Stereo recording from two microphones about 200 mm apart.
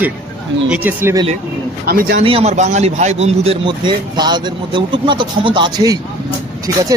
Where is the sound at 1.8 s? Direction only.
50° right (ahead or behind).